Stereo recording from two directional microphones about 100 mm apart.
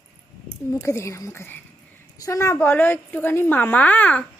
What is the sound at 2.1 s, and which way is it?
A woman's voice, 35° left (ahead or behind).